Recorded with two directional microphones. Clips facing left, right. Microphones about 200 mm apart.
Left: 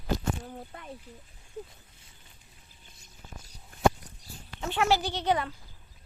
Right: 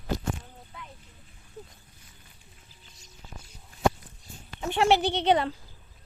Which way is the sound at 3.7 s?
55° left (ahead or behind).